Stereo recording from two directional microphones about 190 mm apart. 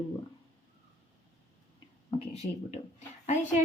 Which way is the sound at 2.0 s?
30° left (ahead or behind).